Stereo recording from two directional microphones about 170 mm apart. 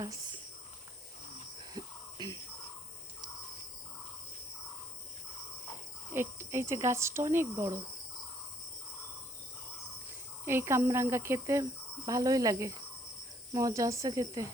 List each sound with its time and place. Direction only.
0.0 s speech: 25° right (ahead or behind)
1.7 s a sound: 25° right (ahead or behind)
6.1 s speech: 15° right (ahead or behind)
10.4 s speech: 15° right (ahead or behind)